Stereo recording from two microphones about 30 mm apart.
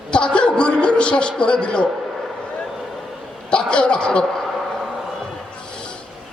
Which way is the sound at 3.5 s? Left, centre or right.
Left.